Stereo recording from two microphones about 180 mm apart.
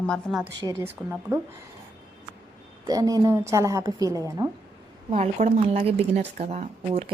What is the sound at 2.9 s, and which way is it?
A woman's voice, 20° right (ahead or behind).